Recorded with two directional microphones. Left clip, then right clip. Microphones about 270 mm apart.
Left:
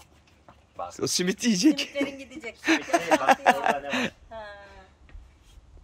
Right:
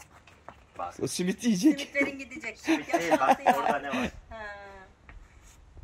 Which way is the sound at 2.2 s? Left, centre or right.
Centre.